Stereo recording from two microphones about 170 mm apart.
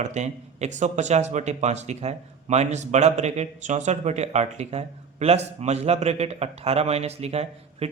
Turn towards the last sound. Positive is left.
turn(degrees=-40)  # may be behind; listen again after turning